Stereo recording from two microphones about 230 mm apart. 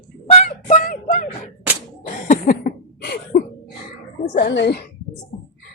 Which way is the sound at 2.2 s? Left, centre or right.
Left.